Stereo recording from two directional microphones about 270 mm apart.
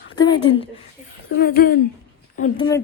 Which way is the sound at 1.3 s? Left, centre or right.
Left.